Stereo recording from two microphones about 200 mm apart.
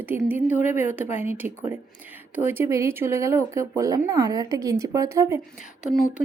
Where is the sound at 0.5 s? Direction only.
40° left (ahead or behind).